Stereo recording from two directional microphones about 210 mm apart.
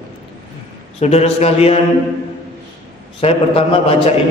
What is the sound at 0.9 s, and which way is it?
Speech, 30° left (ahead or behind).